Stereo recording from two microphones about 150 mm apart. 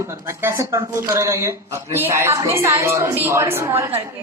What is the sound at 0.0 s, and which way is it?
Speech, 20° right (ahead or behind).